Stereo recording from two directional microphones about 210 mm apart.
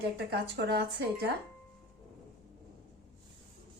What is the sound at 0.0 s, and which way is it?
Speech, 50° right (ahead or behind).